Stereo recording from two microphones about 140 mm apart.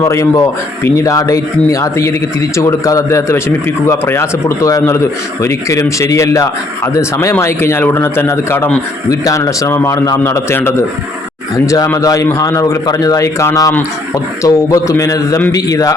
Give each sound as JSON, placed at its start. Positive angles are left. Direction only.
{"t": 0.0, "sound": "speech", "side_deg": 20}